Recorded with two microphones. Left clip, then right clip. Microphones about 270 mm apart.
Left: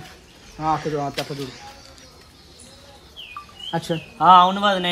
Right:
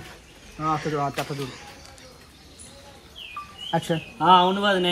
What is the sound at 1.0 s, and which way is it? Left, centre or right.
Speech, right.